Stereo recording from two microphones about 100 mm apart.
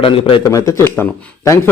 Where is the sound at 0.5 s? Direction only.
30° left (ahead or behind).